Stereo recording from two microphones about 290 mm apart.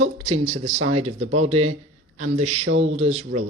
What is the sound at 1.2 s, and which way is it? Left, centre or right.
Speech, right.